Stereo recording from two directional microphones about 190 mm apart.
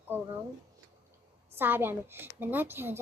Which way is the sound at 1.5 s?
10° right (ahead or behind).